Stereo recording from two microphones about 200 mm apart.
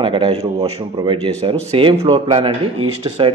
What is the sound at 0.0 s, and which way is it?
Speech, 25° right (ahead or behind).